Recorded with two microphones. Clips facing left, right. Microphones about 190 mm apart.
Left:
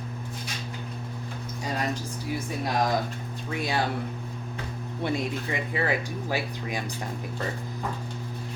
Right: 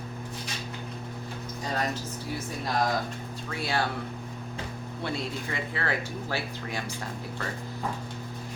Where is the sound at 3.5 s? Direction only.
20° left (ahead or behind).